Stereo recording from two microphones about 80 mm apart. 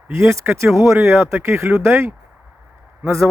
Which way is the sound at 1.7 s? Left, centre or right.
Centre.